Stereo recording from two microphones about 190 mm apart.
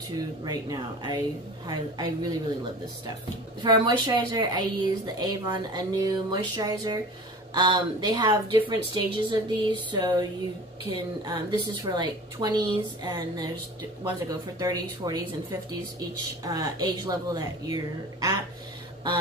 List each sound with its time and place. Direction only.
0.1 s a woman's voice: 20° right (ahead or behind)
3.6 s a woman's voice: 20° right (ahead or behind)
11.2 s a woman's voice: 25° right (ahead or behind)
16.4 s a woman's voice: 20° right (ahead or behind)